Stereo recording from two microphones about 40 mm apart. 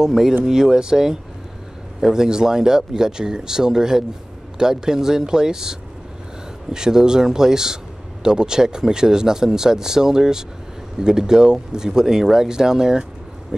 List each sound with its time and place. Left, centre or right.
0.0 s speech: centre